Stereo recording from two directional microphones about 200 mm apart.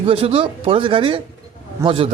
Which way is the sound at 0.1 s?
30° right (ahead or behind).